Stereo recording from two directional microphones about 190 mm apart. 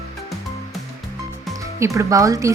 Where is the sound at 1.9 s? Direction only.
15° right (ahead or behind).